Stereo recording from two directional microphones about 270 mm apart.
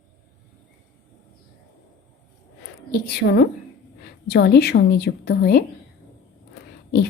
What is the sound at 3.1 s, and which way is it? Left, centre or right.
A woman's voice, left.